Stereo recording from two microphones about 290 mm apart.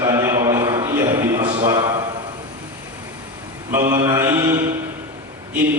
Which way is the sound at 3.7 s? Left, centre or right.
Centre.